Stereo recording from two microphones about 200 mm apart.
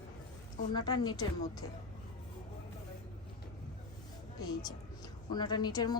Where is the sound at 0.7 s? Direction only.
20° left (ahead or behind).